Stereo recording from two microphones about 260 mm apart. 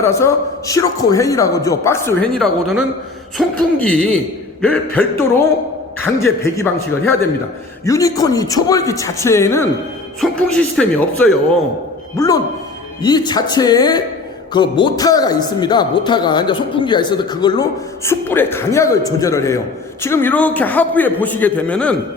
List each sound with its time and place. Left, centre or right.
0.0 s a man's voice: centre
4.6 s a man's voice: centre